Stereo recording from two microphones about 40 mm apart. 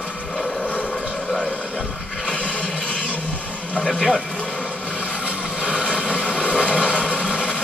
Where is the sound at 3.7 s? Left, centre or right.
Left.